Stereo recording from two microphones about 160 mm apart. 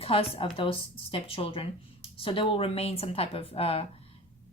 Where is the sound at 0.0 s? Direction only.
35° left (ahead or behind).